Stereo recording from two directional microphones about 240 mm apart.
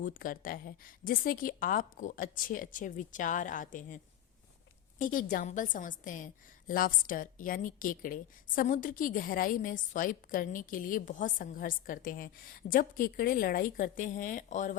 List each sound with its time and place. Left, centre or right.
0.0 s a woman's voice: left